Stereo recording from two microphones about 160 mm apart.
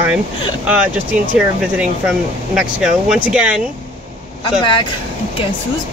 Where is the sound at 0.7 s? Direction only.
10° right (ahead or behind).